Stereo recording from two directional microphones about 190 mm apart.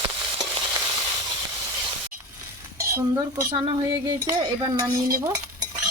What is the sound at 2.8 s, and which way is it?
Dishes, 15° right (ahead or behind).